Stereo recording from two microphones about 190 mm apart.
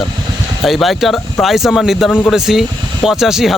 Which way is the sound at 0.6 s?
Centre (ahead or behind).